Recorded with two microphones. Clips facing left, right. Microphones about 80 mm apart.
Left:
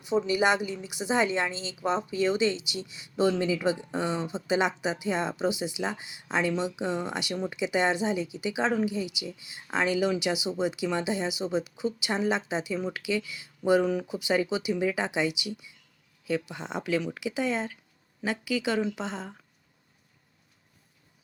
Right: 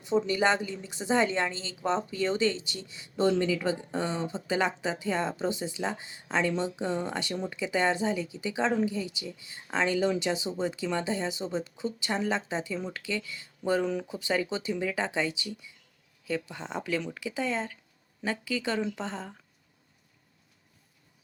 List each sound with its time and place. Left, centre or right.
0.0 s speech: centre